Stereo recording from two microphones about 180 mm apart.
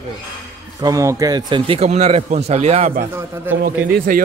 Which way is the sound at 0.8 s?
20° right (ahead or behind).